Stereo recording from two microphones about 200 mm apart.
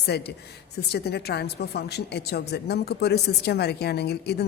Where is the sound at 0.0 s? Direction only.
55° left (ahead or behind).